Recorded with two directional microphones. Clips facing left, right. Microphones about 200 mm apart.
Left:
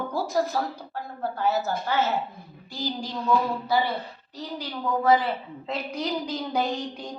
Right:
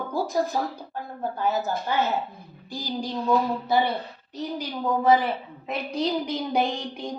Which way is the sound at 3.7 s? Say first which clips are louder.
Right 2 dB; 20° right (ahead or behind).